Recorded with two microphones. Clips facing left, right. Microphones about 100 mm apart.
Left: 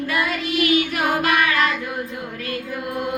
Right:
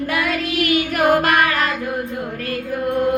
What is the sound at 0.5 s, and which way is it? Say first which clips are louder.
Child singing: even; 45° right (ahead or behind).